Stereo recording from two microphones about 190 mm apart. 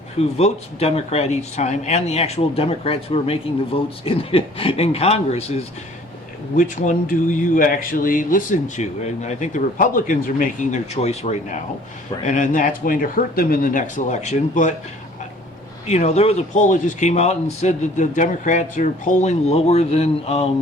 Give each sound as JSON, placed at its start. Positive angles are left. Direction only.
{"t": 0.2, "sound": "speech", "side_deg": 35}
{"t": 6.6, "sound": "speech", "side_deg": 45}
{"t": 15.9, "sound": "speech", "side_deg": 35}